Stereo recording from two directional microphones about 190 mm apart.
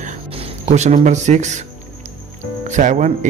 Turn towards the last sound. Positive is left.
turn(degrees=-40)  # may be behind; listen again after turning